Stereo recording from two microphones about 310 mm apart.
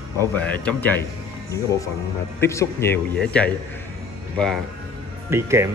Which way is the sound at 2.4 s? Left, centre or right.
Centre.